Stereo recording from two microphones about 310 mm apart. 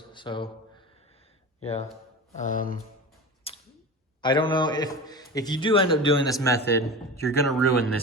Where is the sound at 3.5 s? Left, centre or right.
Centre.